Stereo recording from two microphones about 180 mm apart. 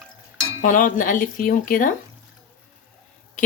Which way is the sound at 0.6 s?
45° left (ahead or behind).